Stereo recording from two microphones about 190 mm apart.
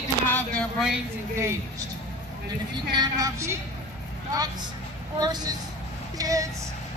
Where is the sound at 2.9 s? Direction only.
20° right (ahead or behind).